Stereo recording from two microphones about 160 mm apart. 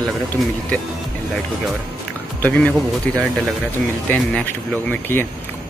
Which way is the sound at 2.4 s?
10° left (ahead or behind).